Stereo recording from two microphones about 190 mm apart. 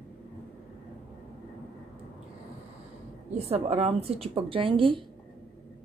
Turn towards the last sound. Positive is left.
turn(degrees=-25)  # may be behind; listen again after turning